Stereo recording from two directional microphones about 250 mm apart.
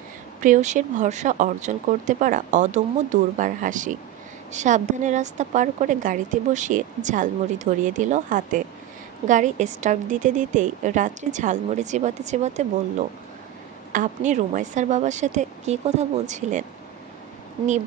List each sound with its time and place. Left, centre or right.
0.4 s a woman's voice: right
13.9 s a woman's voice: right